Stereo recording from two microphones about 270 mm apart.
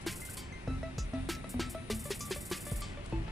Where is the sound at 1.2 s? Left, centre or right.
Centre.